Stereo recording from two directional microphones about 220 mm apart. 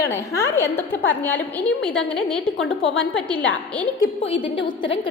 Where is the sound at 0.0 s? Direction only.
15° left (ahead or behind).